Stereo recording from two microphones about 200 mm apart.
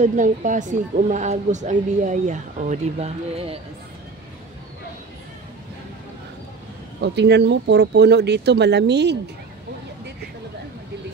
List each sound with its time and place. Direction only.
0.0 s speech: 40° right (ahead or behind)
7.0 s speech: 60° right (ahead or behind)